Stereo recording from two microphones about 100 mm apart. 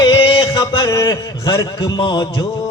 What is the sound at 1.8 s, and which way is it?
Music, 50° left (ahead or behind).